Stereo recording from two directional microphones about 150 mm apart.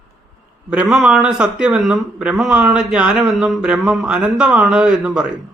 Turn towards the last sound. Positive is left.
turn(degrees=-5)  # may be behind; listen again after turning